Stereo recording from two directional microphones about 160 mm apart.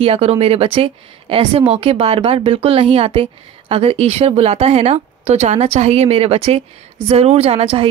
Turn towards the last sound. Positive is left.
turn(degrees=-35)  # may be behind; listen again after turning